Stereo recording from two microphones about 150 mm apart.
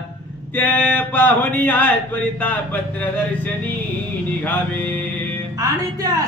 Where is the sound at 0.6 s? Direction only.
10° left (ahead or behind).